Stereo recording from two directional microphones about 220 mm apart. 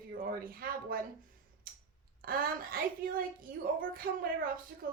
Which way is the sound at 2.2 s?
40° right (ahead or behind).